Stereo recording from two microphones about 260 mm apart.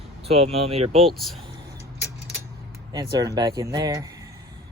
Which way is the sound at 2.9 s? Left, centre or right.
Centre.